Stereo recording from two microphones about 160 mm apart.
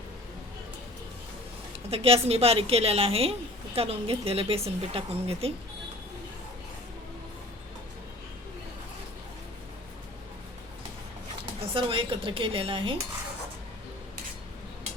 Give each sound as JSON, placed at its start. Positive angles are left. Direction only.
{"t": 1.9, "sound": "a woman's voice", "side_deg": -40}
{"t": 11.7, "sound": "a woman's voice", "side_deg": -35}